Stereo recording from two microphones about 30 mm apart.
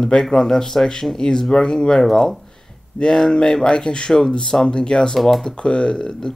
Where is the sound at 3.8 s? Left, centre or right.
Left.